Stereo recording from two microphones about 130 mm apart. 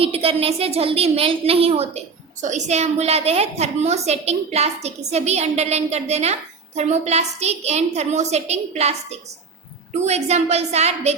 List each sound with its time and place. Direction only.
0.0 s a woman's voice: 50° right (ahead or behind)
2.4 s a woman's voice: 65° right (ahead or behind)